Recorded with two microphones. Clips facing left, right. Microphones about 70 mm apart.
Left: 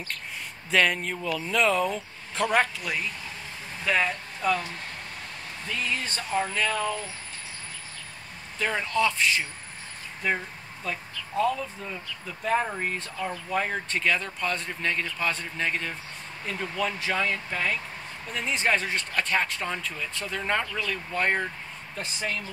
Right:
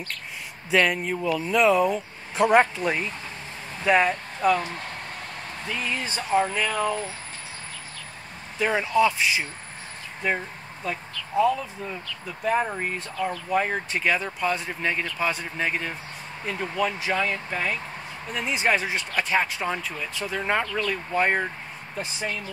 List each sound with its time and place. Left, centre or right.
0.7 s speech: centre
5.7 s speech: centre
8.5 s speech: centre